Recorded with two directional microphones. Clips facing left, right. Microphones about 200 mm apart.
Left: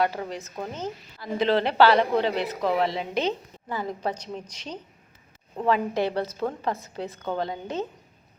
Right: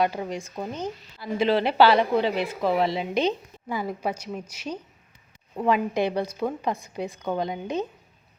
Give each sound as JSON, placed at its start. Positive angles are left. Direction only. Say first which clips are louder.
{"t": 0.0, "sound": "a woman's voice", "louder": "right 1 dB", "side_deg": -15}